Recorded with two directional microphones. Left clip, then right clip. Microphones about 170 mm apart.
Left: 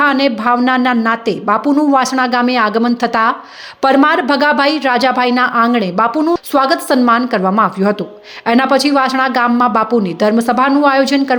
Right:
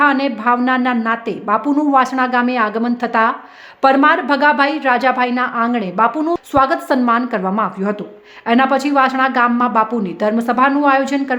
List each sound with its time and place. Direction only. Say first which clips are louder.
0.0 s a woman's voice: left 2 dB; 15° left (ahead or behind)